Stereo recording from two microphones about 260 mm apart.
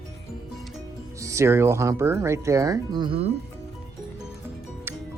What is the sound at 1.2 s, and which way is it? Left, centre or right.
Speech, centre.